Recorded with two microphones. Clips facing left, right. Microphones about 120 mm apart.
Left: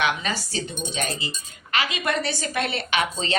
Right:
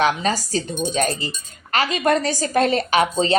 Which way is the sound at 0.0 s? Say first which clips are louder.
Right 6 dB; 35° right (ahead or behind).